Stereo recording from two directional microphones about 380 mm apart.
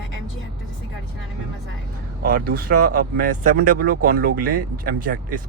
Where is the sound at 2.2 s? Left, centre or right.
Right.